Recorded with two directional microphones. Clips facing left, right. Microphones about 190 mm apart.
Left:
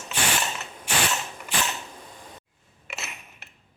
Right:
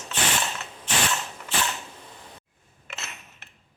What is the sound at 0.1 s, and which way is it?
Mechanisms, 10° left (ahead or behind).